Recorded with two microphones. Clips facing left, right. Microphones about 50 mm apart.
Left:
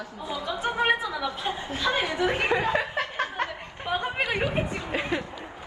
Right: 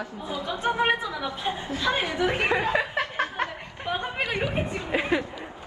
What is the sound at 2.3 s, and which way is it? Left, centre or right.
Speech, right.